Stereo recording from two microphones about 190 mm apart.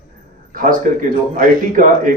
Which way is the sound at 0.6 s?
45° right (ahead or behind).